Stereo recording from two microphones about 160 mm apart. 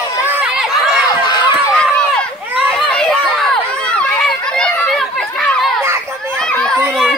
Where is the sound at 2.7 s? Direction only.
5° left (ahead or behind).